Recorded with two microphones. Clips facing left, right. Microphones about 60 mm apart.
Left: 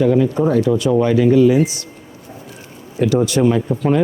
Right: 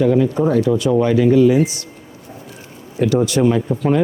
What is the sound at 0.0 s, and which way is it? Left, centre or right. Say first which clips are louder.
Speech: even; left.